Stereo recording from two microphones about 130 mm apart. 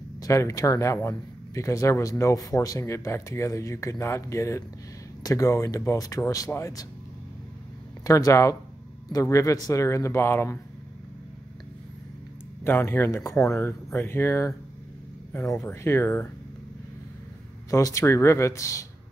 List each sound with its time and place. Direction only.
0.2 s speech: 25° left (ahead or behind)
8.0 s speech: 25° left (ahead or behind)
12.6 s speech: 15° left (ahead or behind)
17.6 s speech: 25° left (ahead or behind)